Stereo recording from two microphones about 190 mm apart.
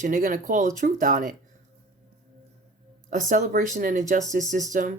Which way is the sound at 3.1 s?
40° right (ahead or behind).